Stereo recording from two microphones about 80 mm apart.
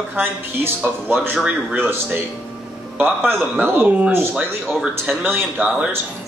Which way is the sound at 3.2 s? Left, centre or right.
Right.